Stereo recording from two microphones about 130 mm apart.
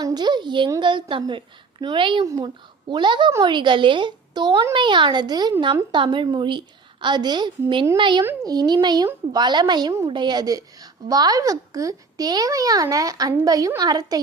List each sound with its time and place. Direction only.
0.0 s a woman's voice: 30° right (ahead or behind)
2.2 s a woman's voice: 30° right (ahead or behind)